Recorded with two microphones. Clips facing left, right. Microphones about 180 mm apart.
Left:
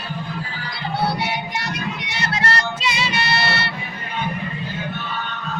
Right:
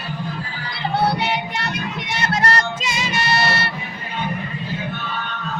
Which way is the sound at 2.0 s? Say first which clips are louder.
Right 5 dB; 50° right (ahead or behind).